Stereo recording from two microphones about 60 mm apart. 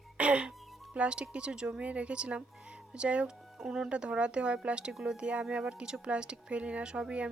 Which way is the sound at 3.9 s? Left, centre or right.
Centre.